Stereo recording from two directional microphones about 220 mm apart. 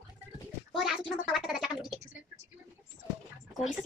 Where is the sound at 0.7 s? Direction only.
Centre (ahead or behind).